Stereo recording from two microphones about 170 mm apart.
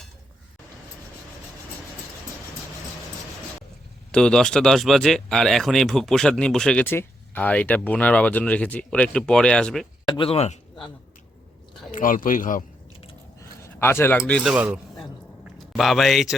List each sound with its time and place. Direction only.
4.1 s speech: 5° left (ahead or behind)
10.1 s speech: 30° left (ahead or behind)
11.9 s speech: 50° left (ahead or behind)
13.7 s speech: 15° left (ahead or behind)
14.4 s speech: 5° right (ahead or behind)